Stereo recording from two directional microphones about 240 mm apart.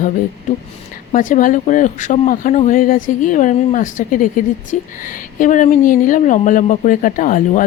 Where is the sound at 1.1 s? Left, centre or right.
Left.